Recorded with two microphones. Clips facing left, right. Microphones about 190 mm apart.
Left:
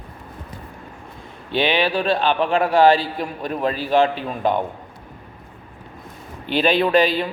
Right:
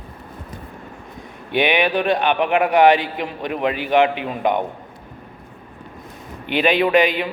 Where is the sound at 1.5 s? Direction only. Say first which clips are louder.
Right 1 dB; 15° right (ahead or behind).